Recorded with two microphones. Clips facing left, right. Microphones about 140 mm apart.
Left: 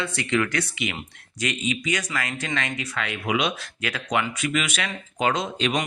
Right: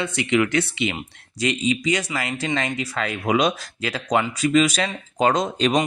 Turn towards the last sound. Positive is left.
turn(degrees=-40)  # may be behind; listen again after turning